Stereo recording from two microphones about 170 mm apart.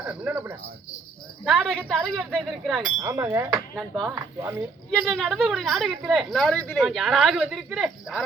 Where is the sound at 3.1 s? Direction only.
15° right (ahead or behind).